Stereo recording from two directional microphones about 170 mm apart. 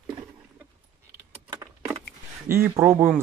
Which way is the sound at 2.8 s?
15° right (ahead or behind).